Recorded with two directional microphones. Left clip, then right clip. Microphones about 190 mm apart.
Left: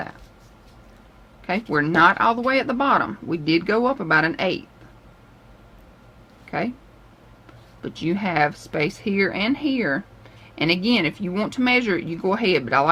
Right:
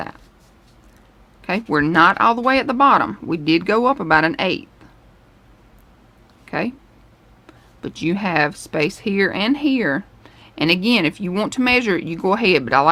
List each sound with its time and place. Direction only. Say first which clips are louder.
1.5 s speech: right 3 dB; 45° right (ahead or behind)
6.5 s a sound: right 3 dB; 45° right (ahead or behind)
7.8 s speech: right 3 dB; 45° right (ahead or behind)